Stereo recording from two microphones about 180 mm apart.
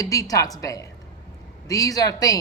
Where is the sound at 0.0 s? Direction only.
20° left (ahead or behind).